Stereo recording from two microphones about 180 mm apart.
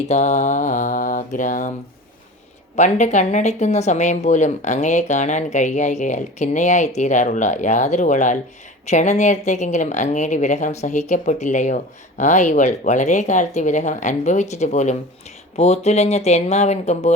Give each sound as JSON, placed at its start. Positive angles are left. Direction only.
{"t": 0.1, "sound": "mantra", "side_deg": 40}
{"t": 2.7, "sound": "speech", "side_deg": 40}